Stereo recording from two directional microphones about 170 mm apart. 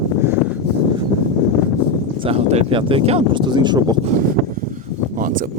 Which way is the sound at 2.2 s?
35° right (ahead or behind).